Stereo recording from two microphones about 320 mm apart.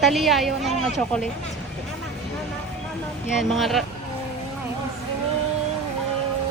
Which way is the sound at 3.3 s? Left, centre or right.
Centre.